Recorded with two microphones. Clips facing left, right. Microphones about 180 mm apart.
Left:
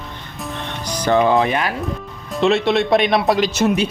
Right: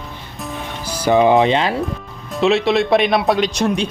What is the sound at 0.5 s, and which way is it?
Music, 5° right (ahead or behind).